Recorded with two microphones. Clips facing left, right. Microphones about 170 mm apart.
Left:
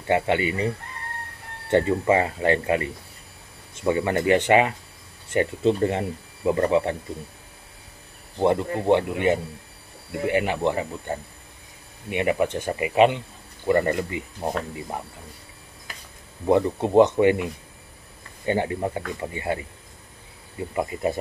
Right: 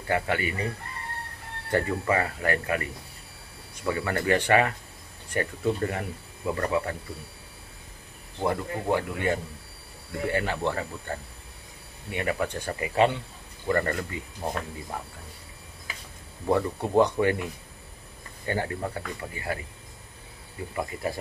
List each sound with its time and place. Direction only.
0.1 s speech: 20° left (ahead or behind)
1.7 s speech: 25° left (ahead or behind)
8.4 s speech: 25° left (ahead or behind)
16.4 s speech: 20° left (ahead or behind)
20.7 s speech: 20° left (ahead or behind)